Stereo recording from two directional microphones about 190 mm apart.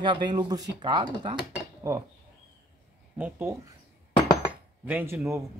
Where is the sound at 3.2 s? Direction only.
10° right (ahead or behind).